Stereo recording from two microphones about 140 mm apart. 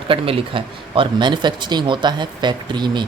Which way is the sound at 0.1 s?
40° right (ahead or behind).